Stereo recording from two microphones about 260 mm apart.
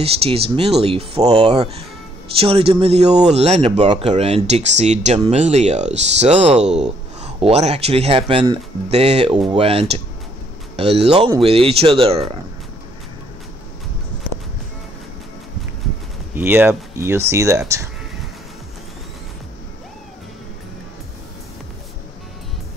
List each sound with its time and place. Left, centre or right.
0.0 s speech: right
16.3 s speech: centre